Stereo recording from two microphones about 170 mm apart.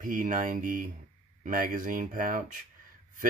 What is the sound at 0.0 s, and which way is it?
Speech, 50° right (ahead or behind).